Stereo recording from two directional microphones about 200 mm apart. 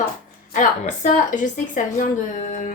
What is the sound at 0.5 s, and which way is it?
A woman's voice, 40° left (ahead or behind).